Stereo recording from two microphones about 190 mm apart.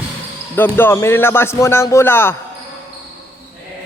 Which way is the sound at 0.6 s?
10° left (ahead or behind).